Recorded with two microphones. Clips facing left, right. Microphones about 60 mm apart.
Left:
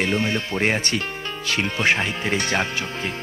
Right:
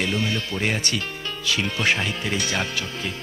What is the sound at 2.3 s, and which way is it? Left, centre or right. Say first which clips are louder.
Speech: left 5 dB; left.